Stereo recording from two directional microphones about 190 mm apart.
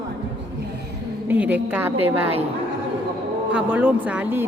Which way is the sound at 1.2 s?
10° right (ahead or behind).